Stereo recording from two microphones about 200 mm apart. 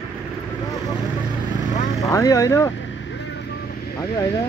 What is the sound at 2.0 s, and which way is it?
Speech, 15° left (ahead or behind).